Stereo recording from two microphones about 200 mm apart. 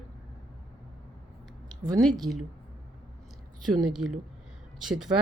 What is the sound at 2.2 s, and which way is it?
Speech, centre (ahead or behind).